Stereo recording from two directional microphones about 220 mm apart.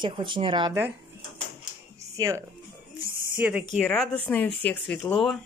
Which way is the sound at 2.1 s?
15° right (ahead or behind).